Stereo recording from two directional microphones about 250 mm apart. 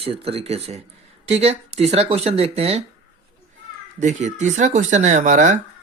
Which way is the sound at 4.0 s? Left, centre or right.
Right.